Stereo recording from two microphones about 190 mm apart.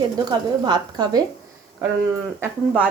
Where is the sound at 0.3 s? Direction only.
20° right (ahead or behind).